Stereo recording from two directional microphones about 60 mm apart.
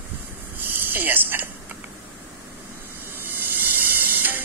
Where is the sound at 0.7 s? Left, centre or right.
Right.